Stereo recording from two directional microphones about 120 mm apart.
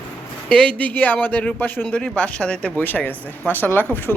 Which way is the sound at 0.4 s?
10° left (ahead or behind).